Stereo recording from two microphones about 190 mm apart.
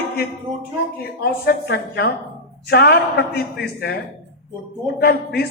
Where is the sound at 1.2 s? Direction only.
55° left (ahead or behind).